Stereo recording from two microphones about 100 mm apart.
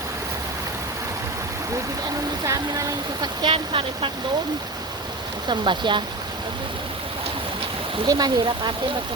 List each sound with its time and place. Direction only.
2.4 s speech: 40° right (ahead or behind)
3.4 s speech: 60° right (ahead or behind)
5.5 s speech: 50° right (ahead or behind)
8.0 s speech: 40° right (ahead or behind)